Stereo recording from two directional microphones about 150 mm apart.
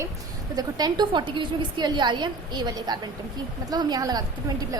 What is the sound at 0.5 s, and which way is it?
A woman's voice, 30° right (ahead or behind).